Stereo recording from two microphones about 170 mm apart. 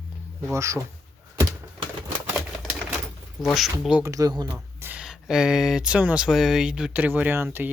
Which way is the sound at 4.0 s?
20° right (ahead or behind).